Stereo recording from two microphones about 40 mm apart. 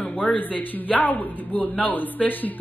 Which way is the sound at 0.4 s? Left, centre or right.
Left.